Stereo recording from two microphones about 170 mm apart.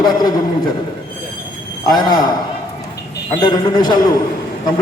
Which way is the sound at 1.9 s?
25° left (ahead or behind).